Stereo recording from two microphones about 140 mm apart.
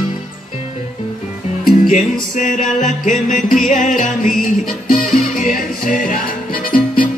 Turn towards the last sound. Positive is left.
turn(degrees=90)